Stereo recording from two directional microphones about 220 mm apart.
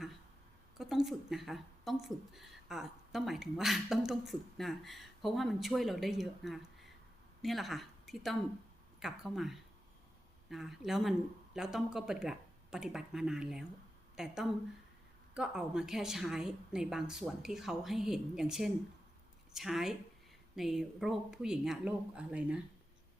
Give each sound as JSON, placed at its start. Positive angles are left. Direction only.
{"t": 0.8, "sound": "a woman's voice", "side_deg": 0}
{"t": 15.4, "sound": "a woman's voice", "side_deg": -5}